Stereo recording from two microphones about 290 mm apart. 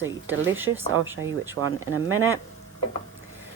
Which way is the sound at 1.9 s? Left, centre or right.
Right.